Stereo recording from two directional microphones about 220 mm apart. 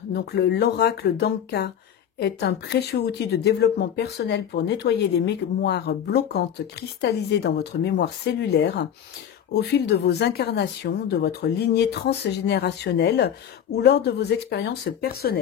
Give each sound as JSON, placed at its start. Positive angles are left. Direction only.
{"t": 0.1, "sound": "speech", "side_deg": 50}